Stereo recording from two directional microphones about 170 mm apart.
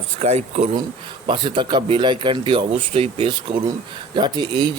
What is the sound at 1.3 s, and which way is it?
Speech, 30° right (ahead or behind).